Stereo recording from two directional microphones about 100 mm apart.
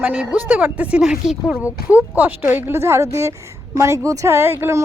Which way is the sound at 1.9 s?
15° right (ahead or behind).